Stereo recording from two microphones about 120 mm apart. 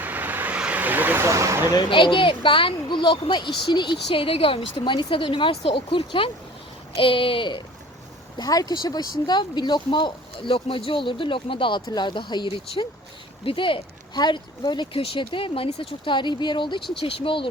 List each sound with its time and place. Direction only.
0.0 s vehicle: 15° right (ahead or behind)
1.7 s speech: 45° left (ahead or behind)
8.4 s speech: 35° left (ahead or behind)